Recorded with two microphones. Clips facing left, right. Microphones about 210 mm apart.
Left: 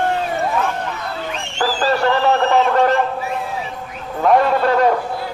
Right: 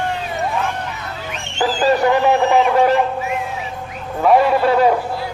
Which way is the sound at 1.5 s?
20° right (ahead or behind).